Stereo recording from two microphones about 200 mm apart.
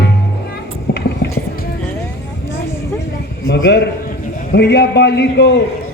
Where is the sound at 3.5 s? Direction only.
60° left (ahead or behind).